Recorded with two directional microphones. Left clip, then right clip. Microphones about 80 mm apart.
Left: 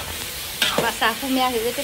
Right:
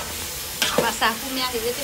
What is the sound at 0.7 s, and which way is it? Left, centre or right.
Stir, centre.